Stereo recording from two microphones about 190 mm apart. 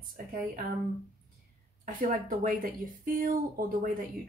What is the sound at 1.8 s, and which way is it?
Speech, 45° right (ahead or behind).